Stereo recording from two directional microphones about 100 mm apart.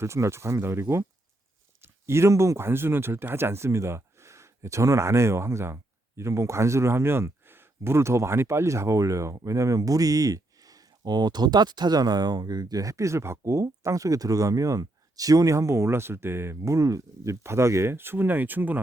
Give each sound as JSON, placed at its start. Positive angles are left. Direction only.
{"t": 0.0, "sound": "speech", "side_deg": -30}